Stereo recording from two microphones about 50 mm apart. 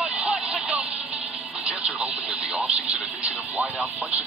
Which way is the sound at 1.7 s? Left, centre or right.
Centre.